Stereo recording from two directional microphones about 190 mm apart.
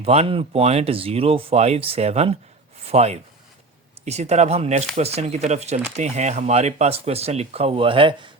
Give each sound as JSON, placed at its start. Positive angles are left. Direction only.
{"t": 0.0, "sound": "speech", "side_deg": -30}